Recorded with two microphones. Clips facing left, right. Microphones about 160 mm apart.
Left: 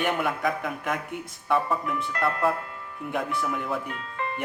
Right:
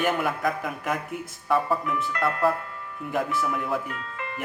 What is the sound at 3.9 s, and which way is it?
Music, 35° left (ahead or behind).